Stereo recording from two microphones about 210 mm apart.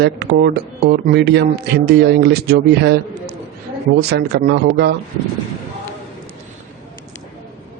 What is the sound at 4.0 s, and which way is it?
Speech, 50° right (ahead or behind).